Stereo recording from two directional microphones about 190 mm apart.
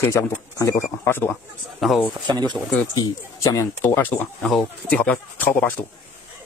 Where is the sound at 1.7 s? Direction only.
Centre (ahead or behind).